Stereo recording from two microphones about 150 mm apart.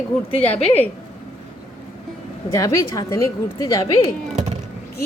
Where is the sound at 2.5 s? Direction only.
20° left (ahead or behind).